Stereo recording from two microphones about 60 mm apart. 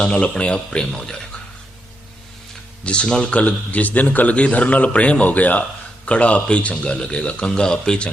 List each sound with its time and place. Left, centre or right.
0.0 s speech: centre
2.8 s a man's voice: centre